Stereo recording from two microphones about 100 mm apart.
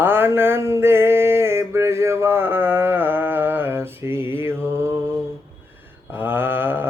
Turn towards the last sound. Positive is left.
turn(degrees=-20)  # may be behind; listen again after turning